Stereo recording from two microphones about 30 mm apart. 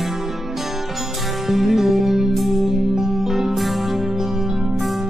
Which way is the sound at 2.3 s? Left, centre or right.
Centre.